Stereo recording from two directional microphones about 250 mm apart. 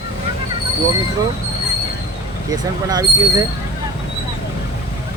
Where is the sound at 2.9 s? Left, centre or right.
Centre.